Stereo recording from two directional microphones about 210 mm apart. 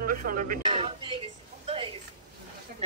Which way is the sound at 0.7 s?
25° right (ahead or behind).